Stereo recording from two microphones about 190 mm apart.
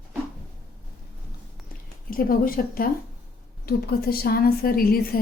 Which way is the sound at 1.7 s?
50° left (ahead or behind).